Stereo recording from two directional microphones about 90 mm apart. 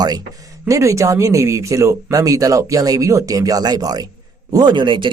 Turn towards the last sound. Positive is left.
turn(degrees=-60)  # may be behind; listen again after turning